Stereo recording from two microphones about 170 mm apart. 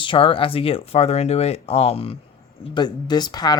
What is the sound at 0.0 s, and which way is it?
Speech, 30° left (ahead or behind).